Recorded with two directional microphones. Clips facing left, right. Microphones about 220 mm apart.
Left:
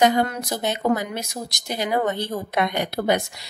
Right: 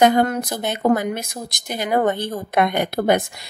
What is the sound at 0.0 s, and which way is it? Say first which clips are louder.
Speech: right 4 dB; 50° right (ahead or behind).